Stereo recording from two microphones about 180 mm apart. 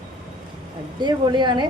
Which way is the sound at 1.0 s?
25° right (ahead or behind).